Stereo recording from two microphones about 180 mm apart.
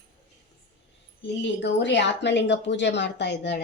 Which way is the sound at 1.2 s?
80° left.